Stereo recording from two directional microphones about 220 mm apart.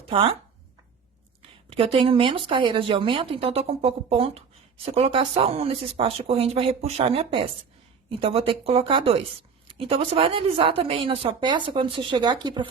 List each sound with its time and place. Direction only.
0.0 s speech: 25° right (ahead or behind)
1.4 s speech: 25° right (ahead or behind)